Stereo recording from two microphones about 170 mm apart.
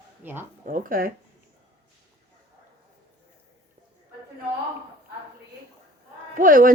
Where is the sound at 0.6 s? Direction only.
55° right (ahead or behind).